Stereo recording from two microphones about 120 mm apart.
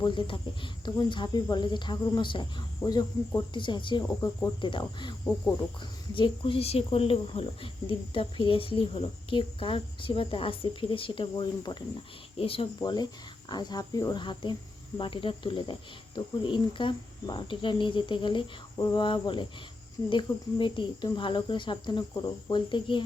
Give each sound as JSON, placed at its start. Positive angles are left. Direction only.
{"t": 0.0, "sound": "speech", "side_deg": 45}
{"t": 4.0, "sound": "speech", "side_deg": 20}
{"t": 4.6, "sound": "speech", "side_deg": 40}
{"t": 12.4, "sound": "speech", "side_deg": 50}
{"t": 12.8, "sound": "speech", "side_deg": 35}